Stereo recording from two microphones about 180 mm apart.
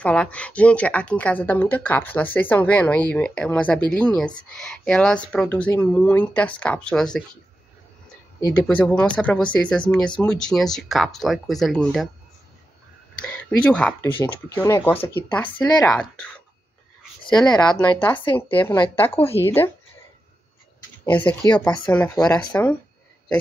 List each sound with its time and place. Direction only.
0.0 s speech: 5° left (ahead or behind)
8.4 s speech: 15° left (ahead or behind)
8.6 s speech: 5° left (ahead or behind)
13.2 s speech: 5° left (ahead or behind)
14.1 s speech: 15° left (ahead or behind)
21.0 s speech: 10° left (ahead or behind)
21.5 s speech: 25° left (ahead or behind)
21.7 s speech: 5° left (ahead or behind)